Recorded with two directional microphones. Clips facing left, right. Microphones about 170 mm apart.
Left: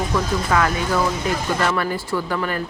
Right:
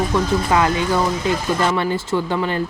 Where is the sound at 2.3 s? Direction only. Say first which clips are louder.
Right 3 dB; 25° right (ahead or behind).